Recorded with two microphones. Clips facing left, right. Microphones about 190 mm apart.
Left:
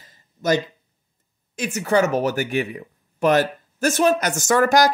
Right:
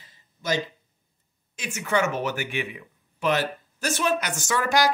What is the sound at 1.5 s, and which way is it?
Speech, 40° left (ahead or behind).